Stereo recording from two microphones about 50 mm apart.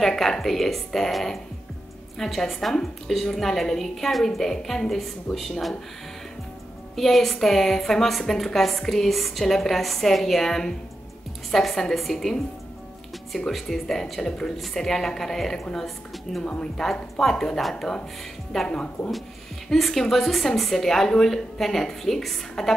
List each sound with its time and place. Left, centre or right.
0.0 s a woman's voice: centre
7.0 s a woman's voice: centre
13.5 s a woman's voice: centre
16.4 s a woman's voice: centre
16.8 s a woman's voice: centre